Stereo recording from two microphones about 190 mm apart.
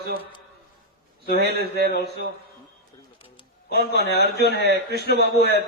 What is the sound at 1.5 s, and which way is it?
Speech, 55° right (ahead or behind).